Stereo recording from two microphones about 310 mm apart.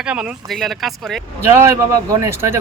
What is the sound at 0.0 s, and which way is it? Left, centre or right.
Speech, centre.